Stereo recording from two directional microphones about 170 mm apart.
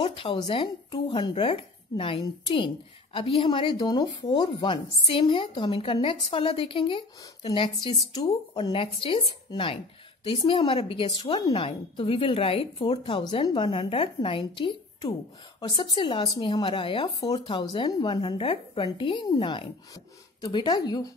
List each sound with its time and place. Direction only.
0.0 s a woman's voice: 30° left (ahead or behind)